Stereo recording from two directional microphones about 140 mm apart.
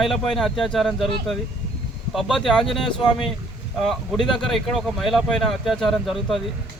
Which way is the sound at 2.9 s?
35° left (ahead or behind).